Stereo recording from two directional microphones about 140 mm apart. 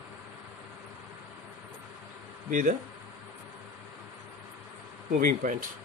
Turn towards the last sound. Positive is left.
turn(degrees=-70)  # may be behind; listen again after turning